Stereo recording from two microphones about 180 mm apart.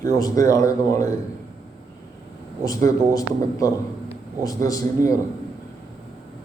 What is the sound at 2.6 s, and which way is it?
Speech, 20° left (ahead or behind).